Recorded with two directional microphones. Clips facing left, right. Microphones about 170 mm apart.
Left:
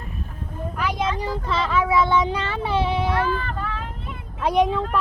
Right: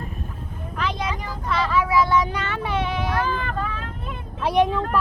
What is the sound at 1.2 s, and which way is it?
Vehicle, 25° left (ahead or behind).